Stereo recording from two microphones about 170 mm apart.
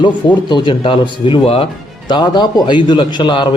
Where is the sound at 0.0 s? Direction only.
25° left (ahead or behind).